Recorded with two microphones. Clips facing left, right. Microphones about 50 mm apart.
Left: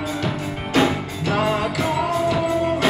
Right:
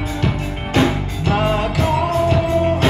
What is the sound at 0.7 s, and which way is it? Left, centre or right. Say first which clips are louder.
Music: right 2 dB; right.